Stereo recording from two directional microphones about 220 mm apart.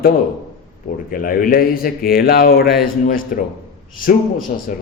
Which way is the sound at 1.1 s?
40° left (ahead or behind).